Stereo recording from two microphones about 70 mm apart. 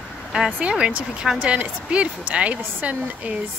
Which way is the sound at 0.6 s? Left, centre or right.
Centre.